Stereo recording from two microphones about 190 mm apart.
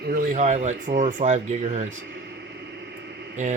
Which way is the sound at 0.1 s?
45° right (ahead or behind).